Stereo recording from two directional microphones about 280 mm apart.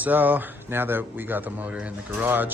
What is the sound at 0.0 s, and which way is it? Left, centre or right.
Speech, centre.